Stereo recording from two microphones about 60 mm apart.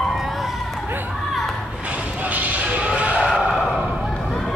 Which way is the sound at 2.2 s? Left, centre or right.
Right.